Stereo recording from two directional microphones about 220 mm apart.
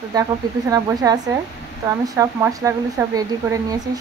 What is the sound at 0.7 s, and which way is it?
A woman's voice, 15° right (ahead or behind).